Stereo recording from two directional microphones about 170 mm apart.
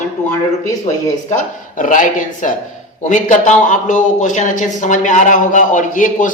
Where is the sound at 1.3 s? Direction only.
50° left (ahead or behind).